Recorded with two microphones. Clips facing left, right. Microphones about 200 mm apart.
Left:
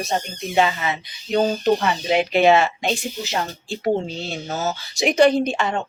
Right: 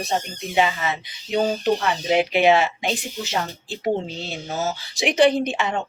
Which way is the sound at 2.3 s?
15° right (ahead or behind).